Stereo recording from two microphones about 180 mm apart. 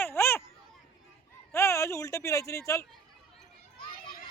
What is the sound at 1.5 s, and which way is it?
Speech, 15° left (ahead or behind).